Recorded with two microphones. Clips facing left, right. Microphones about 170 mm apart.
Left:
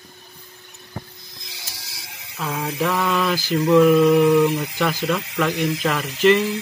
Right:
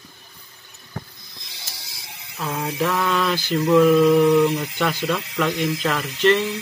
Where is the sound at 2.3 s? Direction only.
Centre (ahead or behind).